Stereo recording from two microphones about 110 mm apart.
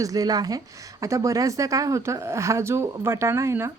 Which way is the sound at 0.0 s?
35° right (ahead or behind).